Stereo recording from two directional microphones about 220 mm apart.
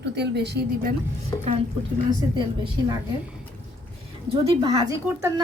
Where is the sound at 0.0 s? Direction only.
50° right (ahead or behind).